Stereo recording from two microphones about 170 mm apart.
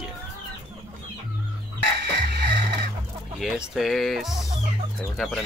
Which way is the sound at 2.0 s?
80° right.